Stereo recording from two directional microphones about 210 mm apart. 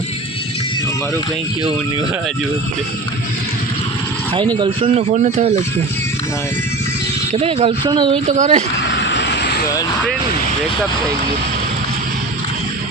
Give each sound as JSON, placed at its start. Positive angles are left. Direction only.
{"t": 4.5, "sound": "a man's voice", "side_deg": -25}
{"t": 7.3, "sound": "speech", "side_deg": -25}
{"t": 8.3, "sound": "a man's voice", "side_deg": -35}
{"t": 8.8, "sound": "vehicle", "side_deg": 55}